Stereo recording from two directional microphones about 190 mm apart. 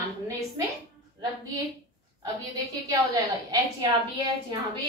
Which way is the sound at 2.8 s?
15° right (ahead or behind).